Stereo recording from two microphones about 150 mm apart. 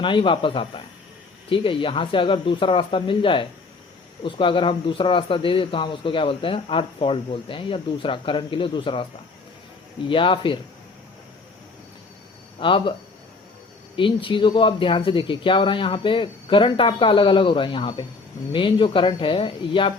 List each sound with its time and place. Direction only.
0.0 s speech: 35° left (ahead or behind)
10.1 s speech: 35° left (ahead or behind)
12.5 s speech: 35° left (ahead or behind)
13.9 s speech: 35° left (ahead or behind)